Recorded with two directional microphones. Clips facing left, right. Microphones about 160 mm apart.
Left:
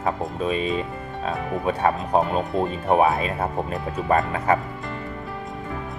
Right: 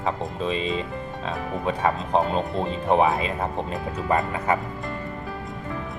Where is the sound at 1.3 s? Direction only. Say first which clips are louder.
Left 3 dB; 15° left (ahead or behind).